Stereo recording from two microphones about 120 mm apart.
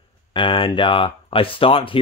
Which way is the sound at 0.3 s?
45° left (ahead or behind).